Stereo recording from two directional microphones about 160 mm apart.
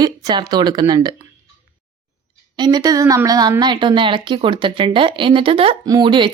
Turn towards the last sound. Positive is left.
turn(degrees=-30)  # may be behind; listen again after turning